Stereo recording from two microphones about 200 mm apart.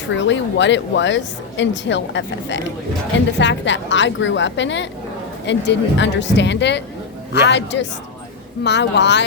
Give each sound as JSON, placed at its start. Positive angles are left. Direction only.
{"t": 0.2, "sound": "speech", "side_deg": 65}